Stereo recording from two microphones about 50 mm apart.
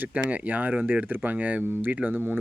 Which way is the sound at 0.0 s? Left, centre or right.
Right.